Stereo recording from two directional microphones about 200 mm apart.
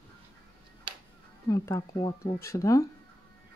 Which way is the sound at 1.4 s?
15° left (ahead or behind).